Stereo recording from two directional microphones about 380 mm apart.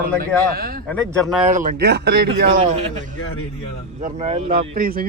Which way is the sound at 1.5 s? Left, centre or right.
Centre.